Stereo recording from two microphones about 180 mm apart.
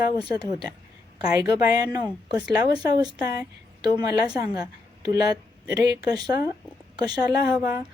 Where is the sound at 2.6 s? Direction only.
20° right (ahead or behind).